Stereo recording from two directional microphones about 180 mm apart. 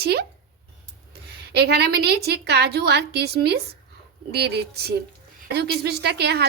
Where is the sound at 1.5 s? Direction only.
65° right (ahead or behind).